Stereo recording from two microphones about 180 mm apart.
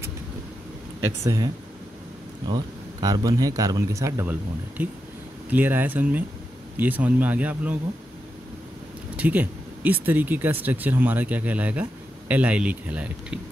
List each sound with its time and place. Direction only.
1.2 s speech: 15° right (ahead or behind)
9.1 s speech: 10° right (ahead or behind)